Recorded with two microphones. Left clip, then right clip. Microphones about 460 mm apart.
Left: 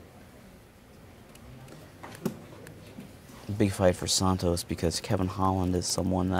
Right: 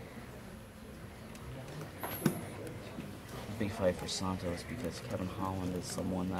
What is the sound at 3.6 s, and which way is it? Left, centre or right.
Speech, left.